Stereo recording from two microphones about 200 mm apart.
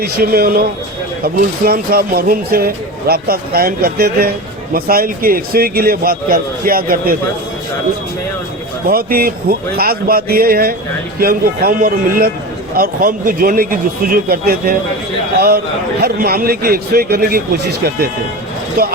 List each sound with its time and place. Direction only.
0.0 s speech: 50° right (ahead or behind)
8.9 s speech: 45° right (ahead or behind)